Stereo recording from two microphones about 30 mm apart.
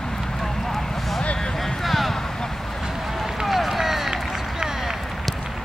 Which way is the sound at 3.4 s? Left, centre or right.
Centre.